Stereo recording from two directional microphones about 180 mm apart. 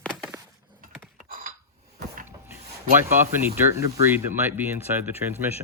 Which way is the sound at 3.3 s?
10° right (ahead or behind).